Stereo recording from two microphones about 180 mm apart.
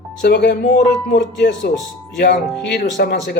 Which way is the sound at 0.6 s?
40° left (ahead or behind).